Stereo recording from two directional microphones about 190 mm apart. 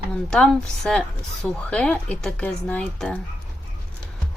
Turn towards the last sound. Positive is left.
turn(degrees=5)  # may be behind; listen again after turning